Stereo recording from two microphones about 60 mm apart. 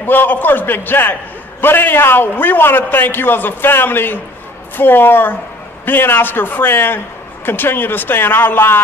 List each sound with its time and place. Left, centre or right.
0.0 s a man's voice: left